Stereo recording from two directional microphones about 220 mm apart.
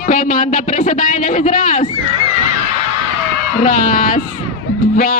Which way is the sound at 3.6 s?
35° left (ahead or behind).